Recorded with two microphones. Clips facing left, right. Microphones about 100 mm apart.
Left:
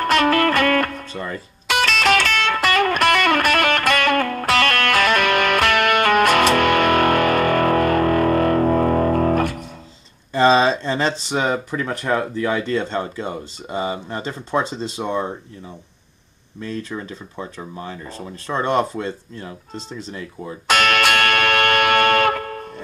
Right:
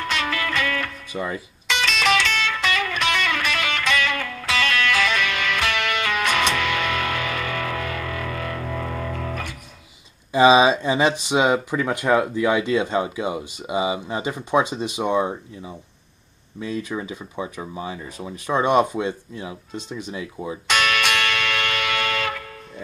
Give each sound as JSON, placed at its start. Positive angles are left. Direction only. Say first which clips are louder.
{"t": 0.0, "sound": "music", "louder": "left 9 dB", "side_deg": 50}
{"t": 1.1, "sound": "speech", "louder": "right 1 dB", "side_deg": -10}
{"t": 1.7, "sound": "music", "louder": "left 3 dB", "side_deg": 50}
{"t": 10.3, "sound": "speech", "louder": "right 1 dB", "side_deg": -10}
{"t": 20.6, "sound": "music", "louder": "left 5 dB", "side_deg": 50}